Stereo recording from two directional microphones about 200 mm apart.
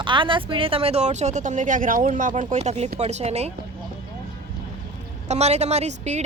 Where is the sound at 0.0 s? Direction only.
25° right (ahead or behind).